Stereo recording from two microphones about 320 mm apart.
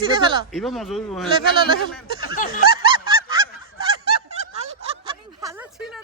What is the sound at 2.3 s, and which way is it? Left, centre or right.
Snicker, left.